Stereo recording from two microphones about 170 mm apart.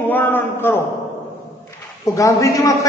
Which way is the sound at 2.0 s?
20° left (ahead or behind).